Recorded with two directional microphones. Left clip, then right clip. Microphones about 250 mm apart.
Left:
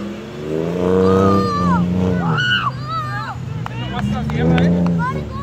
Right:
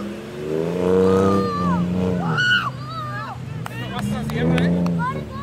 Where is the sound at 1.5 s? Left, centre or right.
Centre.